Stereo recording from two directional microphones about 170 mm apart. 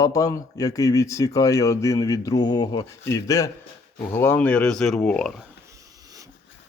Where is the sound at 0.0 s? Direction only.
20° left (ahead or behind).